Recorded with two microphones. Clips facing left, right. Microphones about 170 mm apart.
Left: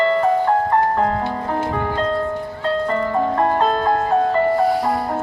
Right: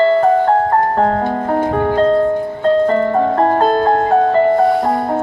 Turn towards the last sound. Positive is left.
turn(degrees=-50)  # may be behind; listen again after turning